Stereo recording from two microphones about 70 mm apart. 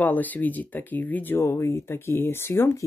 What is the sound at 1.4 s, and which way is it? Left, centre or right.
Speech, left.